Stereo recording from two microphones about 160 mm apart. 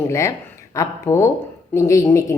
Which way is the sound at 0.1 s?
20° left (ahead or behind).